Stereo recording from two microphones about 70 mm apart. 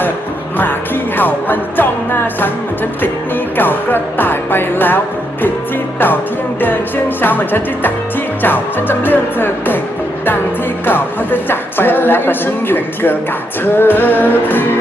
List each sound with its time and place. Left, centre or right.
1.1 s music: left
3.6 s speech: left
6.6 s speech: left
10.8 s speech: left